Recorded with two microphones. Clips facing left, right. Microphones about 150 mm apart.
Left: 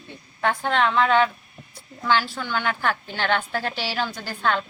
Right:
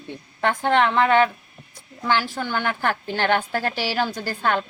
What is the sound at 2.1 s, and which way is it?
A woman's voice, 15° right (ahead or behind).